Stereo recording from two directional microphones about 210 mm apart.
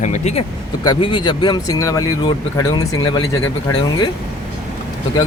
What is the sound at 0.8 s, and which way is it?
Speech, 20° left (ahead or behind).